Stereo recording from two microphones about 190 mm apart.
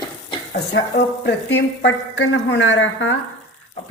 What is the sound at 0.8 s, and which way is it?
A woman's voice, 65° left (ahead or behind).